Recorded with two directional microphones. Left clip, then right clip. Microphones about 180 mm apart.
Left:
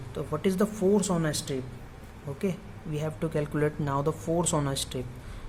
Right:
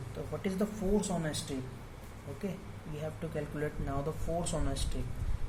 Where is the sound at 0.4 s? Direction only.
50° left (ahead or behind).